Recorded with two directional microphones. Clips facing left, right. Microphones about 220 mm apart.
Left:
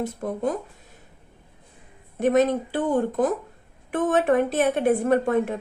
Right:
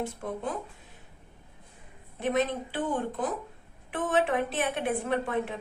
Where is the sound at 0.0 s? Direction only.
40° left (ahead or behind).